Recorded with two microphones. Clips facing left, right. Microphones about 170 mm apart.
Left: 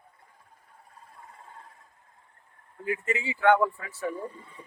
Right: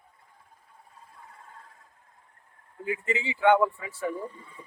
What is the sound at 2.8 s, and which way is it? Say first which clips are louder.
Speech: even; 20° right (ahead or behind).